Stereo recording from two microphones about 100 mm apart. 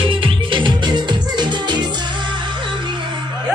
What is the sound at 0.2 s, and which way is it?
Music, 55° right (ahead or behind).